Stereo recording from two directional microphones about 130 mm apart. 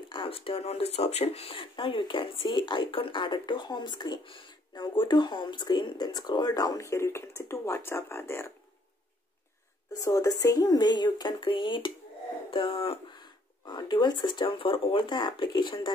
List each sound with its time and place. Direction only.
0.1 s speech: 45° left (ahead or behind); by 8.5 s 20° left (ahead or behind)
9.9 s speech: 25° left (ahead or behind)